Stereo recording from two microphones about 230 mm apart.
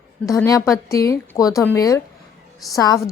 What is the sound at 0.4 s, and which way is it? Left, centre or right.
A woman's voice, centre.